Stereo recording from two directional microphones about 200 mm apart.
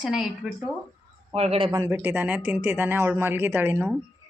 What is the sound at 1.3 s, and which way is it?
Speech, 30° right (ahead or behind).